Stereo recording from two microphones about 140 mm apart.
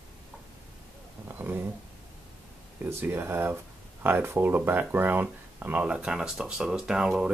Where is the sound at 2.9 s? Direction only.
15° right (ahead or behind).